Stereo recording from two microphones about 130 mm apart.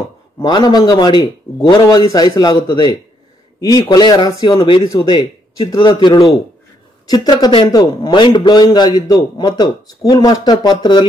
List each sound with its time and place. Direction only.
0.4 s a man's voice: 30° left (ahead or behind)
4.6 s a man's voice: 40° left (ahead or behind)